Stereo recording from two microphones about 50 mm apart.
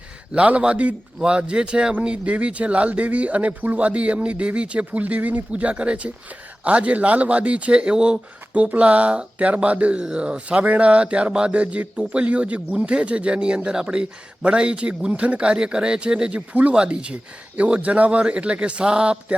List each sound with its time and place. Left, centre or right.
0.3 s speech: right
16.5 s speech: right